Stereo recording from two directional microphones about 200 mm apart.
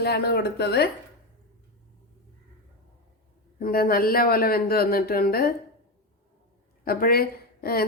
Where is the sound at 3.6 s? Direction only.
45° left (ahead or behind).